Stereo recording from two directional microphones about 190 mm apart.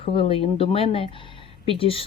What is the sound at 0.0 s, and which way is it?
Speech, 30° left (ahead or behind).